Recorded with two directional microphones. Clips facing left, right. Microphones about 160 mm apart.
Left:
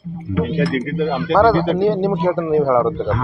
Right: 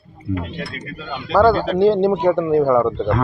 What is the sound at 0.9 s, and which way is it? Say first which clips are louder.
Speech: left 11 dB; 40° left (ahead or behind).